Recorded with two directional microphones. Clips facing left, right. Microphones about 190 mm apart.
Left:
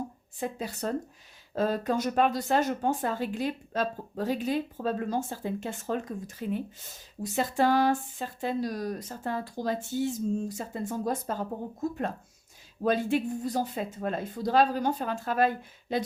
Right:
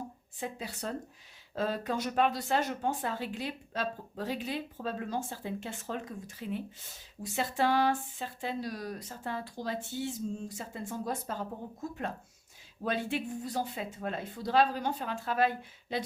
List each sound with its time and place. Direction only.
0.3 s speech: 45° left (ahead or behind)